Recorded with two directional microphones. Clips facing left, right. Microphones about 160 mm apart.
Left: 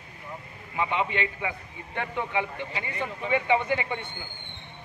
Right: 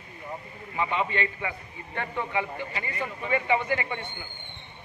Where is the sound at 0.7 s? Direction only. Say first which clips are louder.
Even; 15° left (ahead or behind).